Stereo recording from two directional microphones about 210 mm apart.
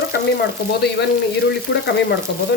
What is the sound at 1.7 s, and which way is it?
Frying, 50° left (ahead or behind).